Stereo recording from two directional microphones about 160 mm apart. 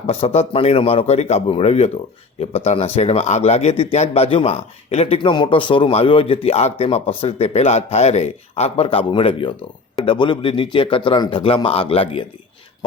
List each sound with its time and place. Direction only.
0.1 s speech: 40° left (ahead or behind)